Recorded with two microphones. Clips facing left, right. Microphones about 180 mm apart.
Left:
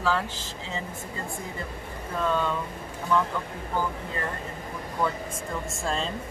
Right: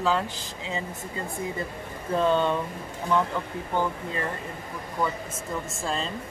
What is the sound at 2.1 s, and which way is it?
Speech, 25° right (ahead or behind).